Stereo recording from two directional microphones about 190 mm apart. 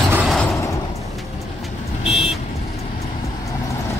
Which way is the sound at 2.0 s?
30° left (ahead or behind).